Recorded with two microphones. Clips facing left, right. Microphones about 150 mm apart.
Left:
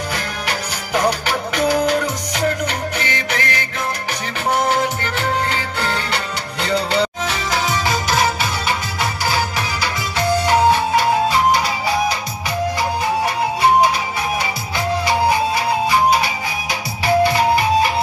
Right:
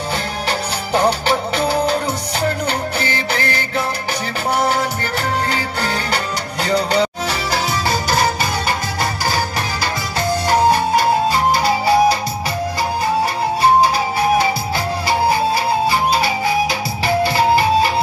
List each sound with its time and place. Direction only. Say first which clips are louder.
0.5 s music: right 4 dB; 30° right (ahead or behind)
5.5 s music: right 1 dB; 40° right (ahead or behind)
10.1 s music: left 1 dB; 40° right (ahead or behind)
15.0 s music: right 2 dB; 35° right (ahead or behind)